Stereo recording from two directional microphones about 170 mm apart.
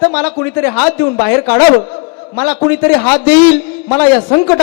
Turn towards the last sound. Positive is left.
turn(degrees=10)  # may be behind; listen again after turning